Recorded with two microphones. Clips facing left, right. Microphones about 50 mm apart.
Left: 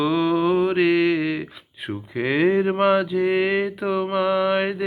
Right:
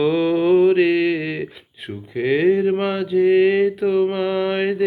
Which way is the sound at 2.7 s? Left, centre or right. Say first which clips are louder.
Left 1 dB; centre.